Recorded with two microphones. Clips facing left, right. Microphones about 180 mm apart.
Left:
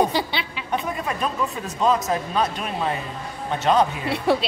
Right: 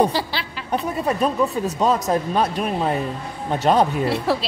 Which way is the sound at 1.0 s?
40° right (ahead or behind).